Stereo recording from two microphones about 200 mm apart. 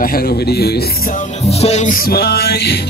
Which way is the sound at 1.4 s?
35° left (ahead or behind).